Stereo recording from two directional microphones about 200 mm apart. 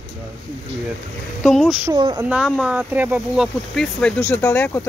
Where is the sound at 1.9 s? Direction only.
25° right (ahead or behind).